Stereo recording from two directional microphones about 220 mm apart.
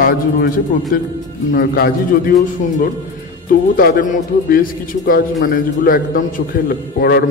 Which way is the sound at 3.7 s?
40° left (ahead or behind).